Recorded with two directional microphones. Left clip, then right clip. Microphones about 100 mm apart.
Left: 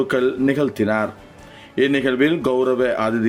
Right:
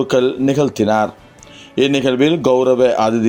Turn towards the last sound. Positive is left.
turn(degrees=-30)  # may be behind; listen again after turning